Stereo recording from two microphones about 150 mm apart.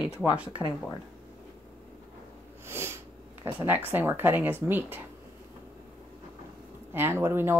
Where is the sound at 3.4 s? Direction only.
15° right (ahead or behind).